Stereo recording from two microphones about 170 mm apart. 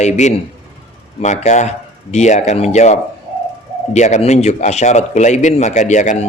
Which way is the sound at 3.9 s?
45° left (ahead or behind).